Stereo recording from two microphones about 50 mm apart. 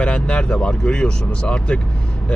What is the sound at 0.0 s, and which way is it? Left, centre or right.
Speech, centre.